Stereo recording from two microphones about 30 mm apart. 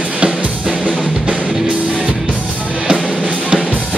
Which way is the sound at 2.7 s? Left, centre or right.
Right.